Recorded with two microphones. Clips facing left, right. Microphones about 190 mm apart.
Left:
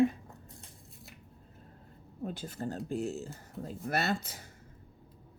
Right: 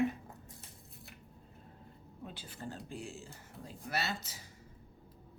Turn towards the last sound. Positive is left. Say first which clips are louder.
# left 7 dB
turn(degrees=55)  # may be behind; listen again after turning